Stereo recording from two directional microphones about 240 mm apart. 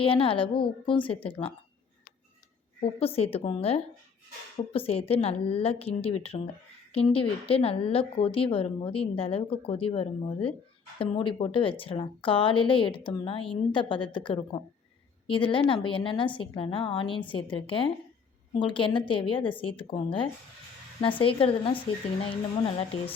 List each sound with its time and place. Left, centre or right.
0.0 s a woman's voice: left
3.0 s a woman's voice: left